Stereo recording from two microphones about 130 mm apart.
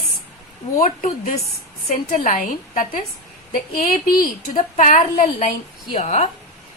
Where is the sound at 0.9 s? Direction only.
60° left (ahead or behind); by 5.5 s 85° left.